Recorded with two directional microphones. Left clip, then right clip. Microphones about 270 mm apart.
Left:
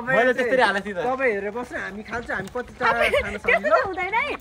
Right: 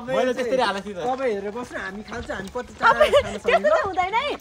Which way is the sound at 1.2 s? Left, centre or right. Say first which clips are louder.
Left 2 dB; centre.